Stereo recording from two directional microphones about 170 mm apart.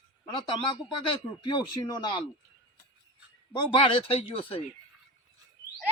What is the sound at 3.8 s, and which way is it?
Speech, 35° left (ahead or behind).